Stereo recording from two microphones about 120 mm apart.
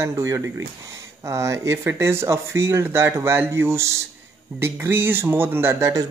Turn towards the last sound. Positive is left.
turn(degrees=-25)  # may be behind; listen again after turning